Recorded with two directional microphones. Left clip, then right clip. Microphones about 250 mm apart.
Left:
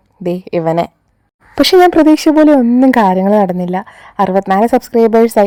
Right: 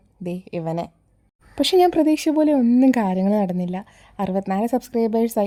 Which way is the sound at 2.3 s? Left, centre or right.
Left.